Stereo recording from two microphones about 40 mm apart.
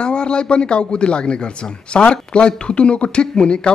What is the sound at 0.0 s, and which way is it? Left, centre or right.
A man's voice, left.